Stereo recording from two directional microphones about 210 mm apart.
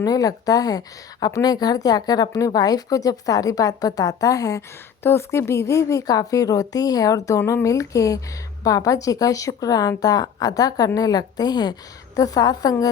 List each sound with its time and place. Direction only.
0.0 s a woman's voice: 15° left (ahead or behind)